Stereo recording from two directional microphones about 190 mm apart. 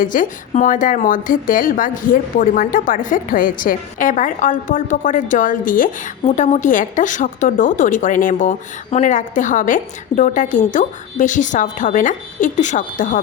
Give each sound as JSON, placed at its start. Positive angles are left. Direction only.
{"t": 0.0, "sound": "speech", "side_deg": 45}